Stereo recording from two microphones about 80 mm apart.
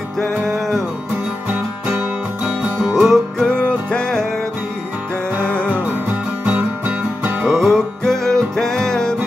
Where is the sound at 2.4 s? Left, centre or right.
Centre.